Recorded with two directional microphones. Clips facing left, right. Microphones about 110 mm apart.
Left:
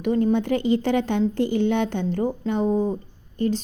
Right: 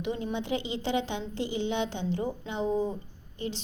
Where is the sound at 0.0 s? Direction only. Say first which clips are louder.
Left 11 dB; 50° left (ahead or behind).